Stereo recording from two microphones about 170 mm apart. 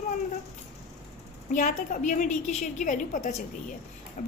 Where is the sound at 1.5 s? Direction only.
50° left (ahead or behind).